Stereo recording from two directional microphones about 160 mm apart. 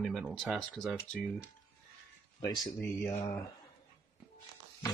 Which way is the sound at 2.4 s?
20° left (ahead or behind).